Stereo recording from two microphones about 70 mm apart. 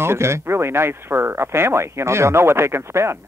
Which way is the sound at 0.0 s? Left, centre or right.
Right.